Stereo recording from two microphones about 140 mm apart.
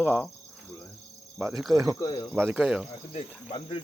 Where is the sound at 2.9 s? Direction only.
40° left (ahead or behind).